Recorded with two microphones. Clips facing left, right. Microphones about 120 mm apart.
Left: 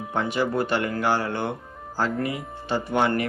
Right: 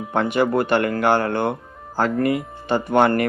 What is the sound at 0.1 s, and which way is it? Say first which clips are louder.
Speech: right 6 dB; 60° right (ahead or behind).